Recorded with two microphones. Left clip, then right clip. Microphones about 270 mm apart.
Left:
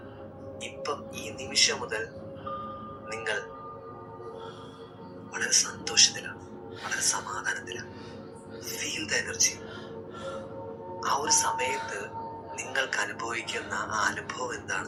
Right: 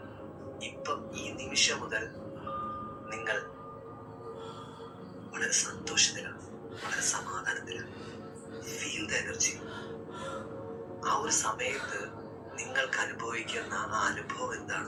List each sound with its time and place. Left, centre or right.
0.8 s a man's voice: left
3.3 s speech: left
5.3 s speech: left
11.0 s speech: left